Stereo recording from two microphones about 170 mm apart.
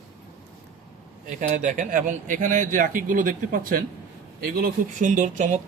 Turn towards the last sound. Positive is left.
turn(degrees=-45)  # may be behind; listen again after turning